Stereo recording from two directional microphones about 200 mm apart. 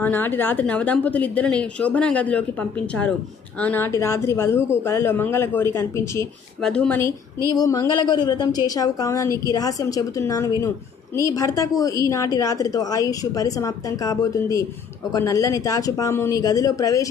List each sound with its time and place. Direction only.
0.0 s a woman's voice: 10° left (ahead or behind)
3.5 s a woman's voice: 10° left (ahead or behind)